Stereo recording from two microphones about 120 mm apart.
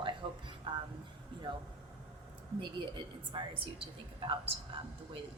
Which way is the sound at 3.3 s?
45° right (ahead or behind).